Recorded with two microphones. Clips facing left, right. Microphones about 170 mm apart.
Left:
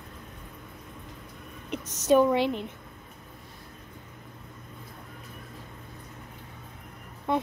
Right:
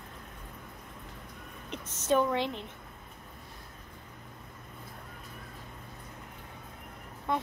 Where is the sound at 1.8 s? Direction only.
90° left.